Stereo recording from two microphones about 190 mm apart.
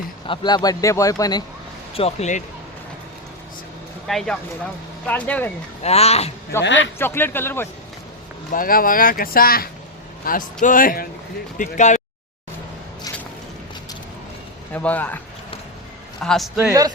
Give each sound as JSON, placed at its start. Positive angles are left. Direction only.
{"t": 0.3, "sound": "speech", "side_deg": 20}
{"t": 2.0, "sound": "speech", "side_deg": 35}
{"t": 4.0, "sound": "speech", "side_deg": 0}
{"t": 5.8, "sound": "speech", "side_deg": 35}
{"t": 6.6, "sound": "a man's voice", "side_deg": 70}
{"t": 7.0, "sound": "speech", "side_deg": 10}
{"t": 8.5, "sound": "speech", "side_deg": 50}
{"t": 14.7, "sound": "speech", "side_deg": 10}
{"t": 16.2, "sound": "speech", "side_deg": 0}